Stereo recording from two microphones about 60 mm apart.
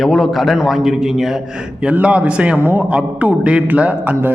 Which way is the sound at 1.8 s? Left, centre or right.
Right.